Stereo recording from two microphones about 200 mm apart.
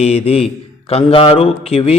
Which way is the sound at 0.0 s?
30° left (ahead or behind).